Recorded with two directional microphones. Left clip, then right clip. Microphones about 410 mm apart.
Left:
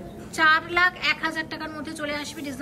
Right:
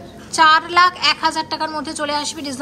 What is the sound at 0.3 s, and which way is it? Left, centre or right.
A woman's voice, centre.